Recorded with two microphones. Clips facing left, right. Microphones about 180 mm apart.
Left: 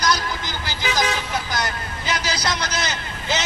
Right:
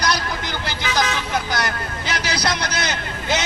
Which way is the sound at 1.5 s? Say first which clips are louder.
Right 2 dB; 65° right (ahead or behind).